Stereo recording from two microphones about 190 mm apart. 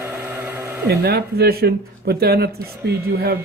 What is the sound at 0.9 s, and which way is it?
Speech, 55° right (ahead or behind).